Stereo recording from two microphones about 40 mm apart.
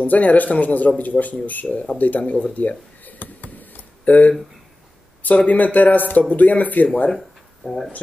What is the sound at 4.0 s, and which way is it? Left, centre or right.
Speech, left.